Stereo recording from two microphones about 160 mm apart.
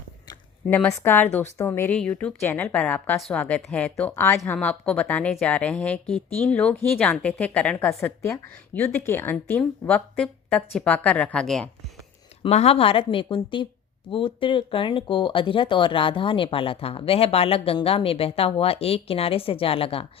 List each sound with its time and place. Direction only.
0.7 s speech: 15° left (ahead or behind)
12.4 s speech: 40° left (ahead or behind)